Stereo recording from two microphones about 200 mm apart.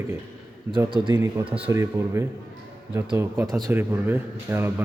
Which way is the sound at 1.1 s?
10° right (ahead or behind).